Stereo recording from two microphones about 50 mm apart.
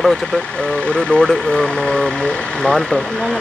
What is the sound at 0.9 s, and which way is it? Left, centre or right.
Speech, centre.